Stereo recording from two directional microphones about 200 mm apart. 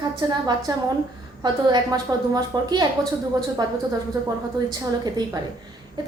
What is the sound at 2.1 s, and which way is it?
Speech, 20° right (ahead or behind).